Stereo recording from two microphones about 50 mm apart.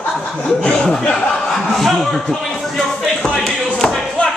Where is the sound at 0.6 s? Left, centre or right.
Centre.